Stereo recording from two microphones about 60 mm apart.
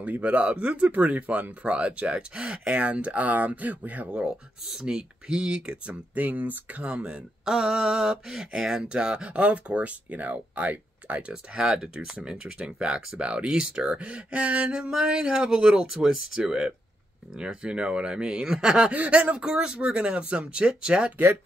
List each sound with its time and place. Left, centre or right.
0.0 s speech: right
4.6 s speech: centre
6.1 s speech: right
7.4 s speech: centre